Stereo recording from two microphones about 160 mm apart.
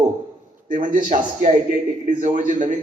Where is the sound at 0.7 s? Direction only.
55° right (ahead or behind).